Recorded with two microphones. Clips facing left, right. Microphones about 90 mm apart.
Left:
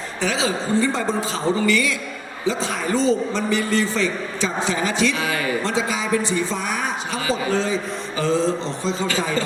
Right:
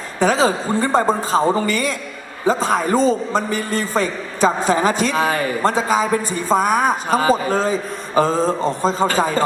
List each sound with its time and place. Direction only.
0.2 s a man's voice: 45° right (ahead or behind)